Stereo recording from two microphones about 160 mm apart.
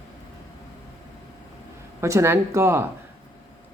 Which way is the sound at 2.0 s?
15° right (ahead or behind).